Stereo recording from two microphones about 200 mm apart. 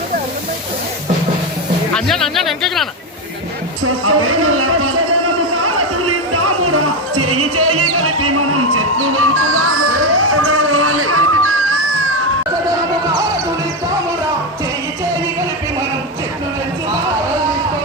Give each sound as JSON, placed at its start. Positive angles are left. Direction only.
{"t": 1.9, "sound": "speech", "side_deg": 0}
{"t": 3.8, "sound": "speech", "side_deg": -90}
{"t": 5.6, "sound": "music", "side_deg": -90}